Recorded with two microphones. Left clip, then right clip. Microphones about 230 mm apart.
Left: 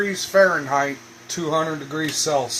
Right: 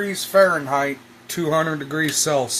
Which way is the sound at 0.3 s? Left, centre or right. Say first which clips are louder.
Right 1 dB; right.